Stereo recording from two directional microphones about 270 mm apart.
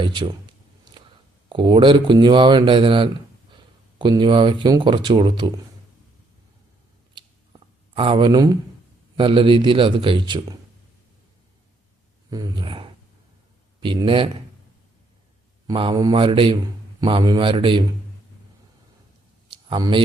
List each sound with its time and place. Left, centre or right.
0.0 s speech: centre
7.1 s clicking: centre
9.1 s a man's voice: centre
12.3 s a man's voice: centre
15.6 s a man's voice: centre
19.7 s speech: centre